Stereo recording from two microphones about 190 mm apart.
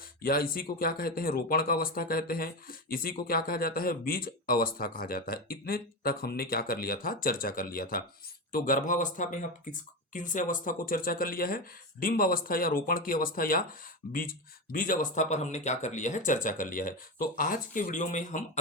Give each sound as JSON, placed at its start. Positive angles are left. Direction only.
{"t": 0.2, "sound": "speech", "side_deg": 50}